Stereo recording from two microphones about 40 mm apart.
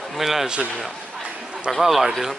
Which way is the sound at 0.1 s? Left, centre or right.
Centre.